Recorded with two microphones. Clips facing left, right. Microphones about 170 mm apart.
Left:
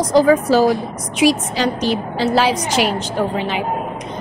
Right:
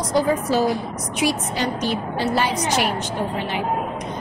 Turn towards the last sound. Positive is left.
turn(degrees=90)